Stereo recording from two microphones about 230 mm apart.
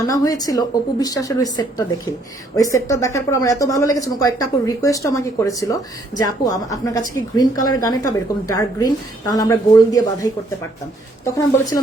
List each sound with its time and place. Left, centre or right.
0.1 s speech: centre
11.3 s speech: centre